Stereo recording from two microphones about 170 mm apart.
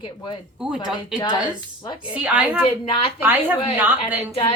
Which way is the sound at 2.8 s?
30° left (ahead or behind).